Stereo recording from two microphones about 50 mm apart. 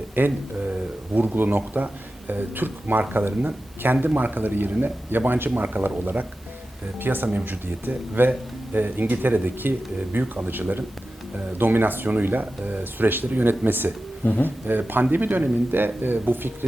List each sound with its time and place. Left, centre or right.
0.3 s a sound: right
1.2 s speech: right
7.0 s speech: right